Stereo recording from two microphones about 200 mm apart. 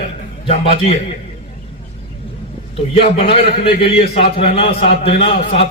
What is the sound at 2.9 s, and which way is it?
A man's voice, 30° left (ahead or behind).